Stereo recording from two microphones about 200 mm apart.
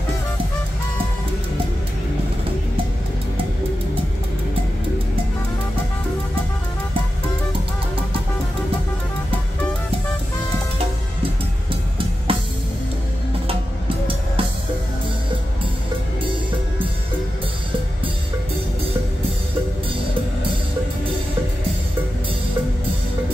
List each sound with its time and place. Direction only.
12.3 s music: 25° right (ahead or behind)